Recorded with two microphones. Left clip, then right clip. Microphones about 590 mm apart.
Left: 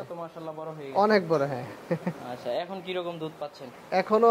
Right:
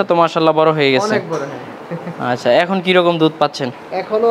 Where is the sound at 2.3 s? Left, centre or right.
Right.